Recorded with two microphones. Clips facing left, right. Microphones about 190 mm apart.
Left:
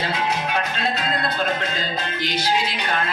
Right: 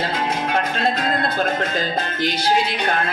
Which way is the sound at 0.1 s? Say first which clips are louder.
Right 2 dB; 50° right (ahead or behind).